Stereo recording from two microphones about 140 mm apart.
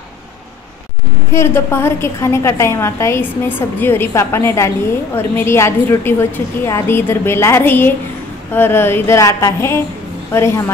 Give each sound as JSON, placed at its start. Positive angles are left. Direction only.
{"t": 1.3, "sound": "a woman's voice", "side_deg": 20}